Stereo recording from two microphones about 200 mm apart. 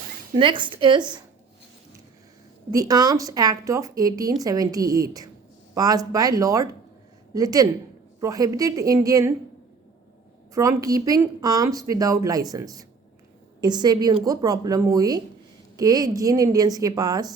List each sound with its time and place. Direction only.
0.3 s speech: 25° right (ahead or behind)
2.7 s a woman's voice: 20° right (ahead or behind)
10.5 s a woman's voice: 15° right (ahead or behind)